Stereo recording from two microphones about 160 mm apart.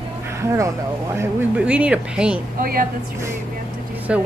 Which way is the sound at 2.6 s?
60° right (ahead or behind).